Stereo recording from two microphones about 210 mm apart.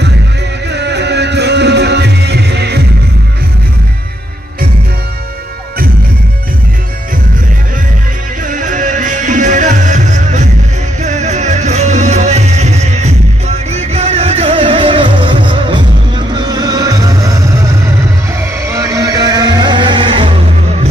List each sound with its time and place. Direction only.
0.7 s music: 55° right (ahead or behind)
8.5 s music: 40° right (ahead or behind)